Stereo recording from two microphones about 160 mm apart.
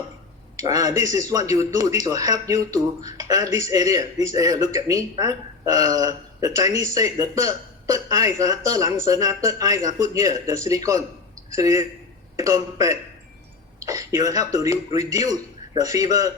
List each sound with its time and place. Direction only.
0.5 s speech: 25° right (ahead or behind)
11.5 s speech: 20° right (ahead or behind)